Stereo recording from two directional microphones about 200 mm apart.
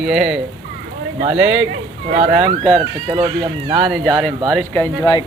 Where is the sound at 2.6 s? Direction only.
5° left (ahead or behind).